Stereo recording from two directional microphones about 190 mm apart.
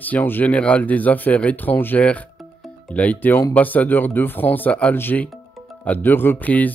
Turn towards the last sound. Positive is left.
turn(degrees=10)  # may be behind; listen again after turning